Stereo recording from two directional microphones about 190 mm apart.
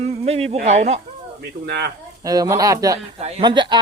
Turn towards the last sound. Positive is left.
turn(degrees=-25)  # may be behind; listen again after turning